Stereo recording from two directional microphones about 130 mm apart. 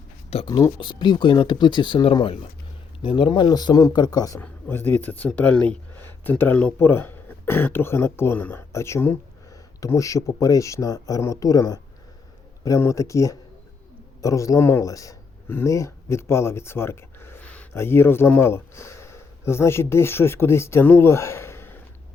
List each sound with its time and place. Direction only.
0.4 s speech: 35° left (ahead or behind)
4.4 s a man's voice: 15° left (ahead or behind)